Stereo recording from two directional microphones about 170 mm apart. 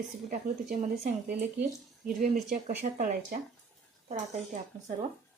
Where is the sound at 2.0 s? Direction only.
45° right (ahead or behind).